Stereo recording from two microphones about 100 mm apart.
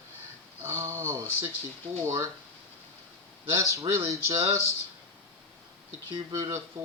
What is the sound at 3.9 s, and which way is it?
Speech, 30° right (ahead or behind).